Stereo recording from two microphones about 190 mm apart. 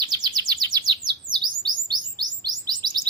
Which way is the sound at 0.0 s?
20° right (ahead or behind).